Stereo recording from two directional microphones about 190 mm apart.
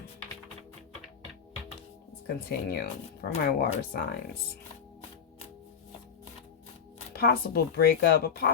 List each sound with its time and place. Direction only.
2.2 s speech: 55° left (ahead or behind)
7.1 s speech: 55° left (ahead or behind)